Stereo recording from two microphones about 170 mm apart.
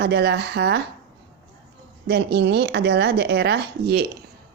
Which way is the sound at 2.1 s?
85° right.